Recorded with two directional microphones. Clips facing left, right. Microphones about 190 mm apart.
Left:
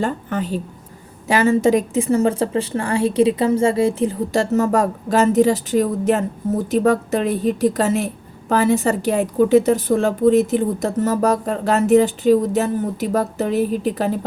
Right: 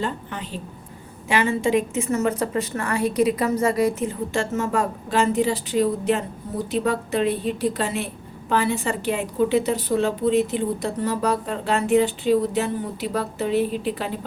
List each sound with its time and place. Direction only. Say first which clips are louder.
0.0 s a woman's voice: left 6 dB; 45° left (ahead or behind)